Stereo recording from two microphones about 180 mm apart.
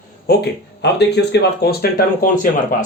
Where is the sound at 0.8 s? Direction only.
70° left (ahead or behind); by 2.5 s 50° left (ahead or behind).